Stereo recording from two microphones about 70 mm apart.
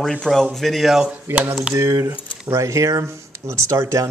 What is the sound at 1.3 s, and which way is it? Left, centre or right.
Speech, right.